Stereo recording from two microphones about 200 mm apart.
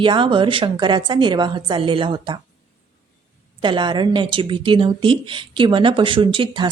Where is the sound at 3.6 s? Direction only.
25° right (ahead or behind).